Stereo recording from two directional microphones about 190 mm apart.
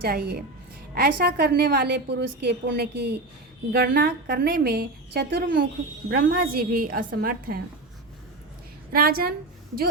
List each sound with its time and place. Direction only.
0.0 s a woman's voice: 55° right (ahead or behind)
8.9 s a woman's voice: 50° right (ahead or behind)